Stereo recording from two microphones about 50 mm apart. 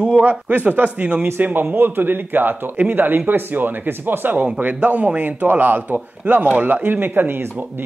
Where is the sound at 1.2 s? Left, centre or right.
Right.